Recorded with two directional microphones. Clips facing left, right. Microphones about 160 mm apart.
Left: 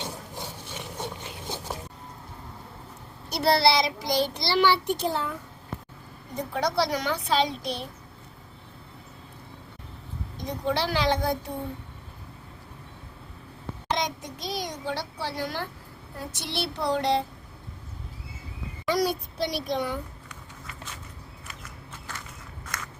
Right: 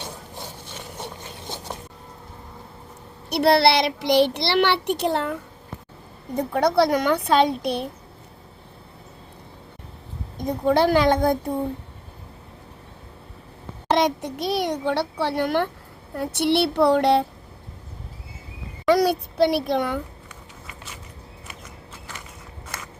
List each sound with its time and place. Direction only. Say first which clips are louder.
3.2 s a child's voice: right 5 dB; 65° right (ahead or behind)
10.4 s a woman's voice: right 9 dB; 50° right (ahead or behind)
13.9 s a child's voice: right 9 dB; 65° right (ahead or behind)
18.9 s a child's voice: right 7 dB; 65° right (ahead or behind)